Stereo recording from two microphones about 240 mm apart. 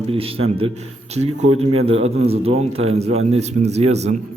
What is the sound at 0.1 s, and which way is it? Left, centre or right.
A man's voice, right.